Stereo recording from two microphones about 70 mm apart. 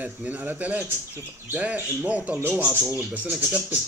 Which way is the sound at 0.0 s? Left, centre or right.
Right.